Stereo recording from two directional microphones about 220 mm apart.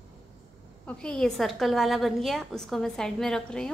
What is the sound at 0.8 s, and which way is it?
A woman's voice, 5° left (ahead or behind).